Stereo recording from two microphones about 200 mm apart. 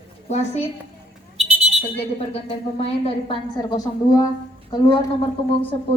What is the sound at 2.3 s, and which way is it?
A woman's voice, 30° left (ahead or behind).